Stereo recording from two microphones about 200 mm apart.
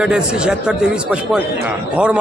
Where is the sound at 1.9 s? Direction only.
5° right (ahead or behind).